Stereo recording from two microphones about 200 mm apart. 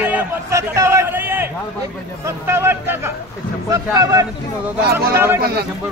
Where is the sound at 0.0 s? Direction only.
10° right (ahead or behind).